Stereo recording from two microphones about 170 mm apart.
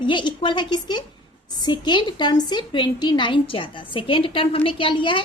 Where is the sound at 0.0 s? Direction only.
30° left (ahead or behind).